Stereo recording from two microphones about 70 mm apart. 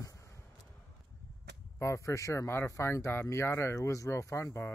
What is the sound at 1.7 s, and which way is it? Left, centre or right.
Speech, left.